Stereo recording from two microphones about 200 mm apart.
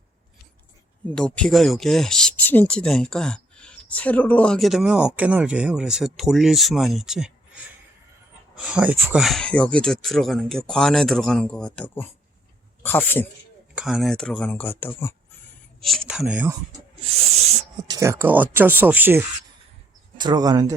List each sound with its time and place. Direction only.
1.1 s a man's voice: 5° left (ahead or behind)
13.7 s speech: centre (ahead or behind)
17.9 s speech: 15° right (ahead or behind)
20.1 s speech: 20° right (ahead or behind)